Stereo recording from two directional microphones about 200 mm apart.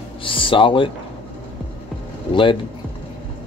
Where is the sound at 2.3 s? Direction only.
25° left (ahead or behind).